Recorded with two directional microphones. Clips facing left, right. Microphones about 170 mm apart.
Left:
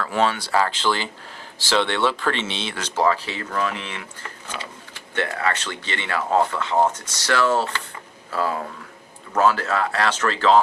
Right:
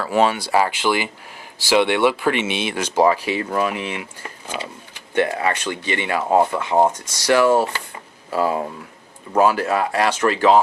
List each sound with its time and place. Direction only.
0.1 s speech: 15° right (ahead or behind)